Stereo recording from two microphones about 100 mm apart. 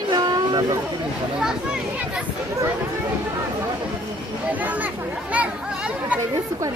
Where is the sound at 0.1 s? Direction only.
40° right (ahead or behind).